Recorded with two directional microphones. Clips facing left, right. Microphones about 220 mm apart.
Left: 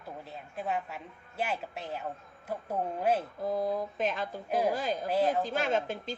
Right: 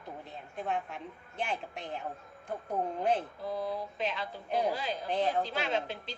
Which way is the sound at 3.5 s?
45° left (ahead or behind).